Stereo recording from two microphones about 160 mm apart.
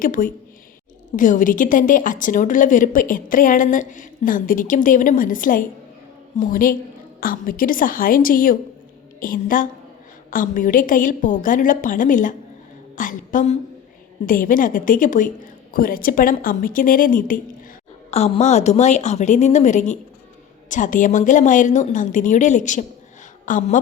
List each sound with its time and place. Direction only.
0.0 s a woman's voice: 60° left (ahead or behind)
18.1 s a woman's voice: 45° left (ahead or behind)